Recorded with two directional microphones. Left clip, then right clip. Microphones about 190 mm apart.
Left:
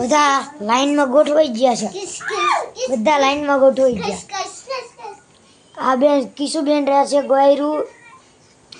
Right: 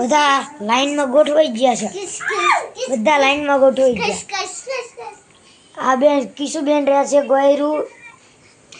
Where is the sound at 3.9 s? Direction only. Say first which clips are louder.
Right 3 dB; 50° right (ahead or behind).